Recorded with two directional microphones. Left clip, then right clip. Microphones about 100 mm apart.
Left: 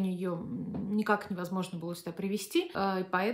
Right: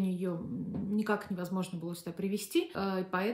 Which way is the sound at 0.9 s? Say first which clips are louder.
Left 4 dB; 35° left (ahead or behind).